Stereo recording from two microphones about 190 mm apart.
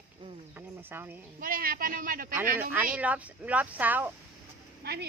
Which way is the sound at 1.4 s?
50° right (ahead or behind).